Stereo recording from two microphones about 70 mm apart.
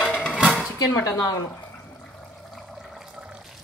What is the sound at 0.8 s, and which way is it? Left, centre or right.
Speech, left.